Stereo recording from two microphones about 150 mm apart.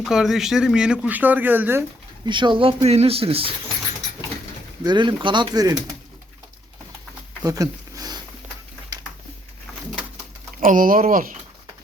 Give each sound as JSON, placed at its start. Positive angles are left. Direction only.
{"t": 0.0, "sound": "speech", "side_deg": -5}
{"t": 2.2, "sound": "speech", "side_deg": -30}
{"t": 4.8, "sound": "speech", "side_deg": -30}
{"t": 7.4, "sound": "a sound", "side_deg": -25}
{"t": 10.6, "sound": "speech", "side_deg": -60}